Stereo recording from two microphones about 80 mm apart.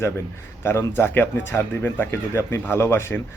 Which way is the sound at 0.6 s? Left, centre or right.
Left.